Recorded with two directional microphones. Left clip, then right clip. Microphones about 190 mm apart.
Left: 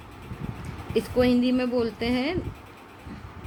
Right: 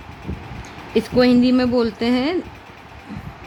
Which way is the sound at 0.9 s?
50° right (ahead or behind).